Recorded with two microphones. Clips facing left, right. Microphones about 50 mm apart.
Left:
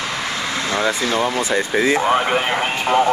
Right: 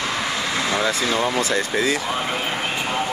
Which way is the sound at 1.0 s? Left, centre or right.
Centre.